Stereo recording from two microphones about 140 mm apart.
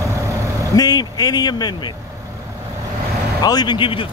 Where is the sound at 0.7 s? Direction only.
30° left (ahead or behind).